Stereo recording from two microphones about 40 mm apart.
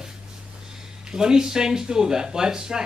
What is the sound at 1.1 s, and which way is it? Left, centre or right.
A man's voice, centre.